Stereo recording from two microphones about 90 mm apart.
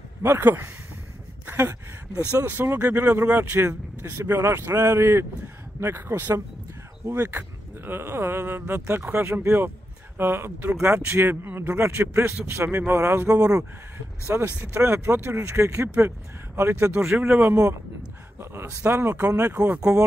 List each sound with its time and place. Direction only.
0.2 s speech: 25° right (ahead or behind)
2.4 s speech: 20° right (ahead or behind); by 13.7 s 40° right (ahead or behind)
14.4 s speech: 20° right (ahead or behind)
16.9 s speech: 5° right (ahead or behind)
17.2 s speech: 25° right (ahead or behind)